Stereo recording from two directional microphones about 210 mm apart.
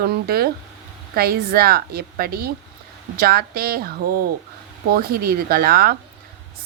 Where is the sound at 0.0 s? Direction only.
45° right (ahead or behind).